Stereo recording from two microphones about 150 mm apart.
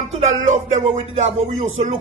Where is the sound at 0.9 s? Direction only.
50° right (ahead or behind).